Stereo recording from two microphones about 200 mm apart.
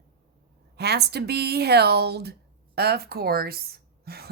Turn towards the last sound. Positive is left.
turn(degrees=-50)  # may be behind; listen again after turning